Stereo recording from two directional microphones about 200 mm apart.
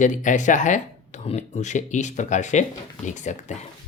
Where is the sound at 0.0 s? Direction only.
40° left (ahead or behind).